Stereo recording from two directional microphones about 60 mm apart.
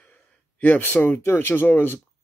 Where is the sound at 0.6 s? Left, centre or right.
Left.